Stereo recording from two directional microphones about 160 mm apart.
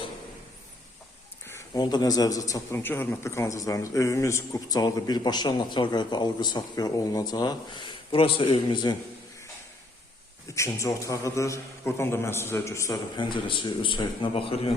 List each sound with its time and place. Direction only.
1.5 s a man's voice: 20° left (ahead or behind)
10.5 s a man's voice: 20° left (ahead or behind)
13.1 s a man's voice: 30° left (ahead or behind)